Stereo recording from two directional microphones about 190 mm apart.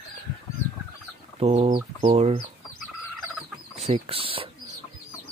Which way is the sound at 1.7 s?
30° right (ahead or behind).